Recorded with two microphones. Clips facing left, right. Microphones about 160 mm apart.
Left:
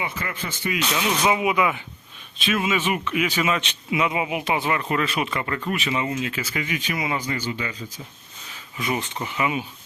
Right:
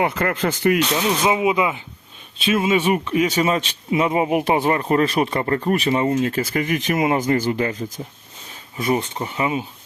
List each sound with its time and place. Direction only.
0.0 s speech: 60° right (ahead or behind)
0.9 s speech: 30° right (ahead or behind); by 7.9 s 45° right (ahead or behind)
8.8 s speech: 30° right (ahead or behind)